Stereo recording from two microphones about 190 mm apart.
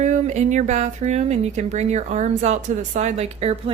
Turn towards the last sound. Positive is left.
turn(degrees=-35)  # may be behind; listen again after turning